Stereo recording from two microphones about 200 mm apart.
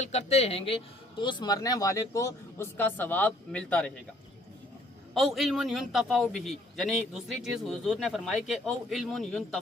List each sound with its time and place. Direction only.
0.0 s speech: 35° left (ahead or behind); by 3.9 s 5° left (ahead or behind)
5.1 s a man's voice: centre (ahead or behind)